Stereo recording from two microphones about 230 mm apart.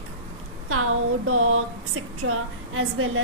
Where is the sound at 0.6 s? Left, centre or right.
Right.